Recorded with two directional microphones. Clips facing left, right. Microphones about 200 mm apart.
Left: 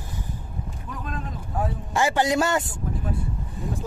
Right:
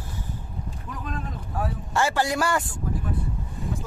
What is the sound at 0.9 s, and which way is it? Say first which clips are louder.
Boat: even; centre (ahead or behind).